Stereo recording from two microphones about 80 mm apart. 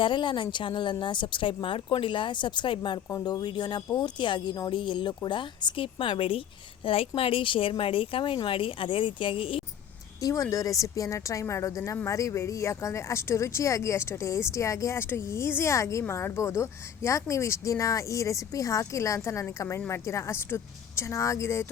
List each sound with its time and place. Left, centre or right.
0.0 s speech: left
3.1 s a woman's voice: left
3.4 s speech: left
3.9 s speech: left
4.7 s speech: left
7.3 s speech: left
10.2 s a woman's voice: left